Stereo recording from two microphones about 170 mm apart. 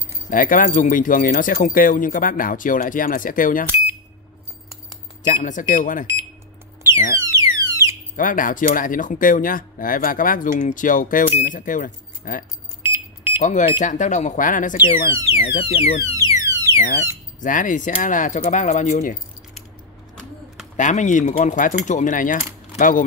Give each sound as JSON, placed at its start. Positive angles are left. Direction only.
{"t": 0.3, "sound": "speech", "side_deg": 55}
{"t": 5.2, "sound": "speech", "side_deg": 50}
{"t": 7.2, "sound": "alarm", "side_deg": -20}
{"t": 8.2, "sound": "speech", "side_deg": 55}
{"t": 12.8, "sound": "smoke detector", "side_deg": -10}
{"t": 13.4, "sound": "speech", "side_deg": 45}
{"t": 15.3, "sound": "speech", "side_deg": 40}
{"t": 16.0, "sound": "alarm", "side_deg": -20}
{"t": 17.4, "sound": "speech", "side_deg": 50}
{"t": 20.7, "sound": "speech", "side_deg": 45}